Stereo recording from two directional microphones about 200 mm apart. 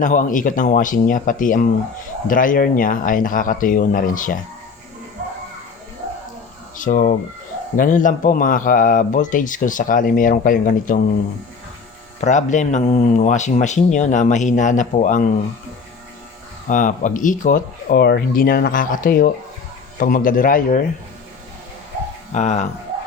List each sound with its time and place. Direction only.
0.0 s a man's voice: 40° left (ahead or behind)
6.7 s a man's voice: 40° left (ahead or behind)
12.2 s a man's voice: 35° left (ahead or behind)
16.6 s speech: 40° left (ahead or behind)
22.3 s speech: 35° left (ahead or behind)